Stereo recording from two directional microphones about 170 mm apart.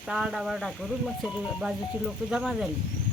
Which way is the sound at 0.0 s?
5° right (ahead or behind).